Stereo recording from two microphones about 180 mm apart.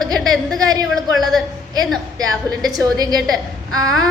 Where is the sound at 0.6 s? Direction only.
20° right (ahead or behind).